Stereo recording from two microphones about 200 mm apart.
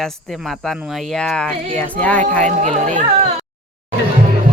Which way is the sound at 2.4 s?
35° right (ahead or behind).